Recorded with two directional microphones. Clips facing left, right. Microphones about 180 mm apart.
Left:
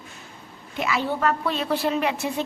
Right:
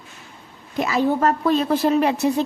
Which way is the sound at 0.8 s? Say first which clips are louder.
Right 5 dB; 40° right (ahead or behind).